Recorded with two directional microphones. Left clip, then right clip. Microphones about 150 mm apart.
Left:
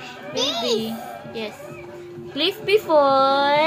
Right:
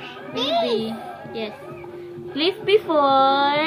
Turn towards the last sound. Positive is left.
turn(degrees=-5)  # may be behind; listen again after turning